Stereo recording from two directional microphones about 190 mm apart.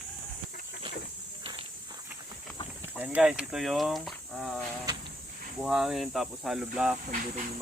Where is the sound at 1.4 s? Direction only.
25° right (ahead or behind).